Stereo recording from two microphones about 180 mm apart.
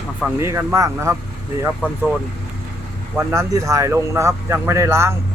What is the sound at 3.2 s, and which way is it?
Speech, 15° right (ahead or behind).